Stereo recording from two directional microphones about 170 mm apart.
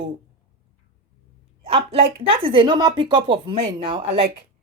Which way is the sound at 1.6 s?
35° right (ahead or behind).